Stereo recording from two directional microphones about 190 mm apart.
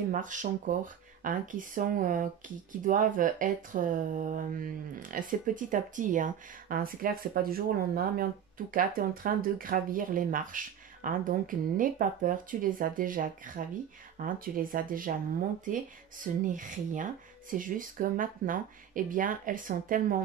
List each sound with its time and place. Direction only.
0.1 s speech: 40° right (ahead or behind)